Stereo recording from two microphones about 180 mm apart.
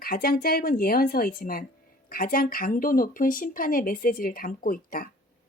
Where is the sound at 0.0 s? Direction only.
55° left (ahead or behind).